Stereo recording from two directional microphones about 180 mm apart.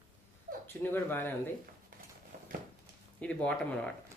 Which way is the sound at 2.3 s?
50° right (ahead or behind).